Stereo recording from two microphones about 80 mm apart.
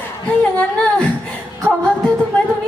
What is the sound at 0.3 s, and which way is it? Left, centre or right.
Speech, centre.